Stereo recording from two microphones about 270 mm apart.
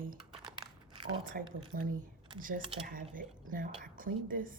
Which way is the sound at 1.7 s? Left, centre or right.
Right.